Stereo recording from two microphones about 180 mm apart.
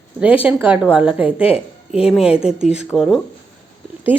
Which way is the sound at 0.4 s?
10° right (ahead or behind).